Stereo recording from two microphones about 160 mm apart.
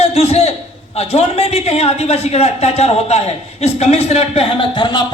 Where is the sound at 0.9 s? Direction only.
40° left (ahead or behind).